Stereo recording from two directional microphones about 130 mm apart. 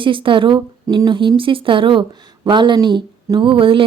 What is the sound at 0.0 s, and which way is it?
Speech, 40° right (ahead or behind).